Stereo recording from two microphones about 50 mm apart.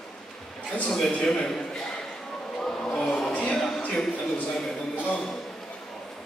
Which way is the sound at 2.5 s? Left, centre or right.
Centre.